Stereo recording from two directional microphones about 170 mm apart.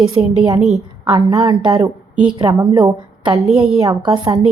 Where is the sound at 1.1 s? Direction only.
20° right (ahead or behind).